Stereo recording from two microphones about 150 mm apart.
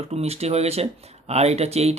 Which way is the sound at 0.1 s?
45° right (ahead or behind).